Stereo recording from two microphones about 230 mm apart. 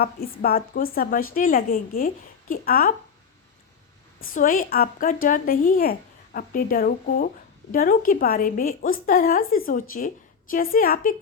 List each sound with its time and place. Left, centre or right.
0.0 s a woman's voice: left
4.4 s a woman's voice: left